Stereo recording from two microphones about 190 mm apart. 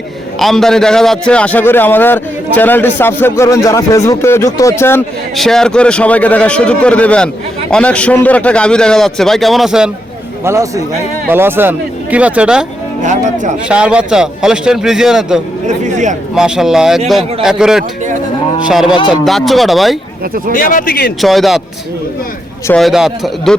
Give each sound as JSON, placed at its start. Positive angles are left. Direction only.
{"t": 0.3, "sound": "a man's voice", "side_deg": 0}
{"t": 5.4, "sound": "a man's voice", "side_deg": 0}
{"t": 10.4, "sound": "speech", "side_deg": -15}
{"t": 13.0, "sound": "speech", "side_deg": -40}
{"t": 13.7, "sound": "a man's voice", "side_deg": -5}
{"t": 15.6, "sound": "speech", "side_deg": -40}
{"t": 16.3, "sound": "a man's voice", "side_deg": 0}
{"t": 20.5, "sound": "speech", "side_deg": 45}
{"t": 21.2, "sound": "a man's voice", "side_deg": 0}
{"t": 22.8, "sound": "a man's voice", "side_deg": 0}